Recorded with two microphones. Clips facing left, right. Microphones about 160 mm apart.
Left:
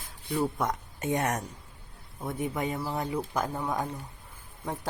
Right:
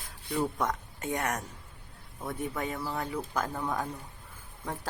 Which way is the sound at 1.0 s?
20° left (ahead or behind).